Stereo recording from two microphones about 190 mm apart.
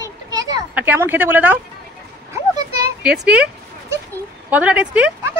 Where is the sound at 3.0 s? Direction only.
5° right (ahead or behind).